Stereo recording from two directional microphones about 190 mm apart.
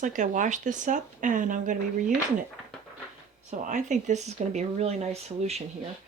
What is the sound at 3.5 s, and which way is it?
Speech, 40° right (ahead or behind).